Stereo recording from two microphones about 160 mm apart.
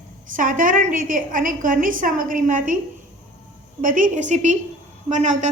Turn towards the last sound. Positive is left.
turn(degrees=-50)  # may be behind; listen again after turning